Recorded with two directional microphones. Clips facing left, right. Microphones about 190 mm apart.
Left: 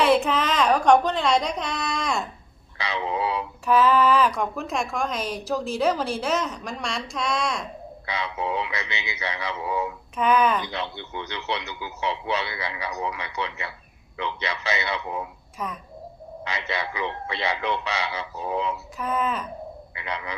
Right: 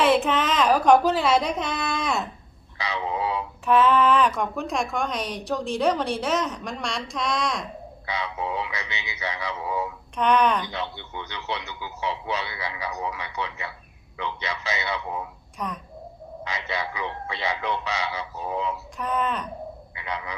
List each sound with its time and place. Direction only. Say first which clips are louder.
0.0 s a woman's voice: even; centre (ahead or behind)
2.7 s speech: left 1 dB; 65° left (ahead or behind)
3.7 s a woman's voice: even; centre (ahead or behind)
8.1 s speech: left 1 dB; 75° left (ahead or behind)
10.2 s a woman's voice: even; 5° left (ahead or behind)
11.3 s a man's voice: left 1 dB; 70° left (ahead or behind)
15.5 s a child's voice: even; centre (ahead or behind)
16.4 s speech: left 1 dB; 70° left (ahead or behind)
18.9 s a woman's voice: even; centre (ahead or behind)
20.0 s speech: even; 75° left (ahead or behind)